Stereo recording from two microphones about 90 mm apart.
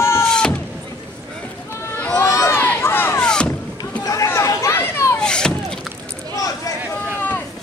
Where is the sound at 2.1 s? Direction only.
35° left (ahead or behind).